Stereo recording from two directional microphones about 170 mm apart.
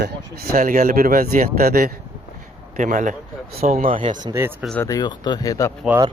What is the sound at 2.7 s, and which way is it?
Speech, 50° right (ahead or behind).